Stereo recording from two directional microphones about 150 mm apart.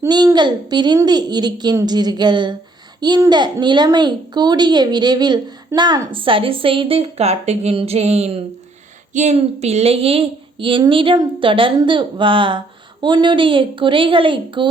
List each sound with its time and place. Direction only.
0.1 s a child's voice: 30° right (ahead or behind)